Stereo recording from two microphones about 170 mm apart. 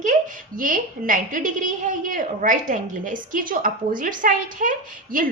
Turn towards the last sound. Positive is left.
turn(degrees=-55)  # may be behind; listen again after turning